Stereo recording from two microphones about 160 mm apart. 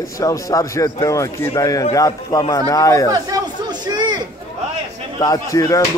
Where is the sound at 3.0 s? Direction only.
25° right (ahead or behind).